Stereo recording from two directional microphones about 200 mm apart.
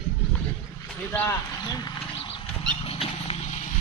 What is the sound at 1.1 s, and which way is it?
Speech, 15° left (ahead or behind).